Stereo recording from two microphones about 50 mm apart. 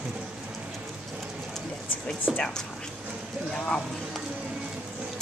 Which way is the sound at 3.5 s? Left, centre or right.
Centre.